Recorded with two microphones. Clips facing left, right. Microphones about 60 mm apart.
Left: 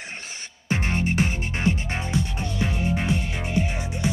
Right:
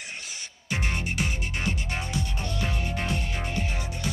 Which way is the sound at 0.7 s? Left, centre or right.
Left.